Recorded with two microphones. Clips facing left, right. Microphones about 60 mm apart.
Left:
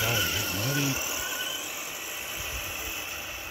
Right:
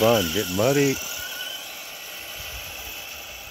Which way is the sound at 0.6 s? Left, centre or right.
Right.